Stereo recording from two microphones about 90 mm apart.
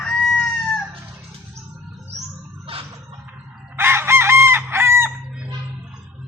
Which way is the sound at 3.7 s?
25° right (ahead or behind).